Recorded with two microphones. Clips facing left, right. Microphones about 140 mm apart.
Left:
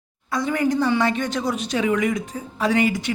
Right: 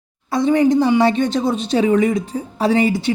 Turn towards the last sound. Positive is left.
turn(degrees=-30)  # may be behind; listen again after turning